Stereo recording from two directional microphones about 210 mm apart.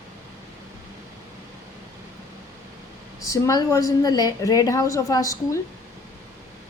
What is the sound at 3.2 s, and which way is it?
A woman's voice, 15° left (ahead or behind).